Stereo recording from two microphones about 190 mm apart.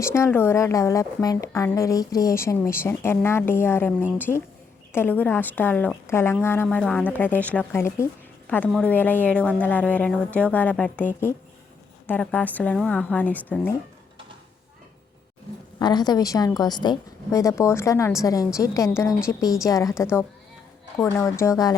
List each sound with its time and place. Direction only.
0.0 s a woman's voice: 15° left (ahead or behind)
15.8 s a woman's voice: 20° left (ahead or behind)